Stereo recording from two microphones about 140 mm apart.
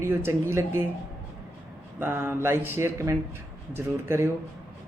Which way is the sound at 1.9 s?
15° right (ahead or behind).